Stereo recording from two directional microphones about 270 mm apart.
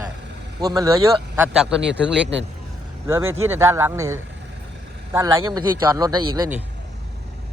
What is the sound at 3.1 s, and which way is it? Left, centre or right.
A man's voice, centre.